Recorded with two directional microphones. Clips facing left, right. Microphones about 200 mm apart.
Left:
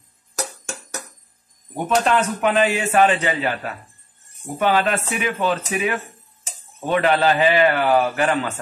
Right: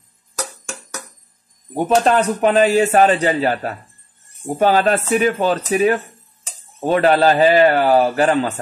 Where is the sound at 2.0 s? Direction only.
35° right (ahead or behind).